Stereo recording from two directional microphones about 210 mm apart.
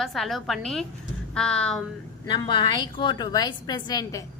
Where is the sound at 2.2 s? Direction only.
20° left (ahead or behind).